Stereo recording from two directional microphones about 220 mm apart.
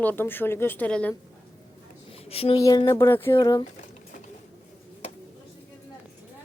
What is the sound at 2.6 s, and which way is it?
Speech, 15° left (ahead or behind).